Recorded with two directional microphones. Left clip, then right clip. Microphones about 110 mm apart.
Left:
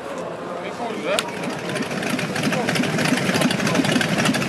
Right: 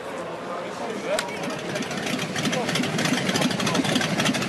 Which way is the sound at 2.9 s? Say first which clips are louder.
Left 3 dB; 10° right (ahead or behind).